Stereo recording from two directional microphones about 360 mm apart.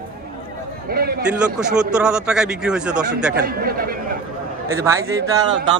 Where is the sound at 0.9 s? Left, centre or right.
Right.